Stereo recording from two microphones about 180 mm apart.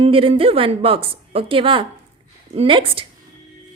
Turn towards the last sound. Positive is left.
turn(degrees=-30)  # may be behind; listen again after turning